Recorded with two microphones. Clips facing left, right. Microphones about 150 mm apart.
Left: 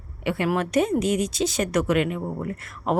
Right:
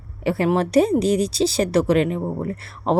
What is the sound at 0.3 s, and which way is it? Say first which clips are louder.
A woman's voice: right 4 dB; 35° right (ahead or behind).